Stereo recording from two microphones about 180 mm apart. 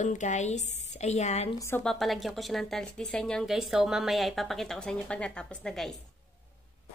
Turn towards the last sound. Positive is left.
turn(degrees=5)  # may be behind; listen again after turning